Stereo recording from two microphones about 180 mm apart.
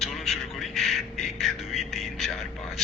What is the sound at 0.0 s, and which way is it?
Music, centre (ahead or behind).